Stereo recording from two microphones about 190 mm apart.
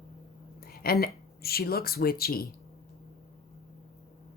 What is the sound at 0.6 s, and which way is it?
Speech, 50° left (ahead or behind).